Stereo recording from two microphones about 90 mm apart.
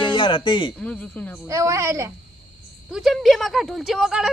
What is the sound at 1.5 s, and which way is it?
Speech, 35° right (ahead or behind).